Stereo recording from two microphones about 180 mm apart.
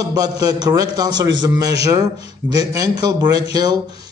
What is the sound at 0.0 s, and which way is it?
A man's voice, 20° right (ahead or behind).